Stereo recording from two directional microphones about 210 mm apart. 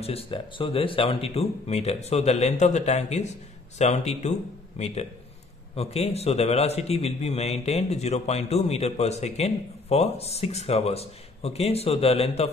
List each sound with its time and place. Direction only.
0.0 s a man's voice: 30° left (ahead or behind)